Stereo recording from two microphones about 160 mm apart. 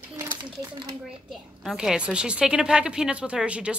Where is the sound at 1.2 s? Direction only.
Centre (ahead or behind).